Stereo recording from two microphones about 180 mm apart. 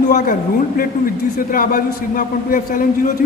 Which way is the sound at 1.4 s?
50° left (ahead or behind).